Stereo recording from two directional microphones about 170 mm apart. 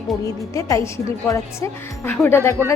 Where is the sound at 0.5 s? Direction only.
20° left (ahead or behind).